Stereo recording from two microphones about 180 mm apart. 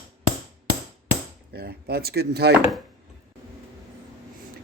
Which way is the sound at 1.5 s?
65° right (ahead or behind).